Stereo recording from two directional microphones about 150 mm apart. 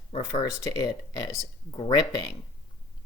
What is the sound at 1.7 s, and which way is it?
Speech, 35° left (ahead or behind).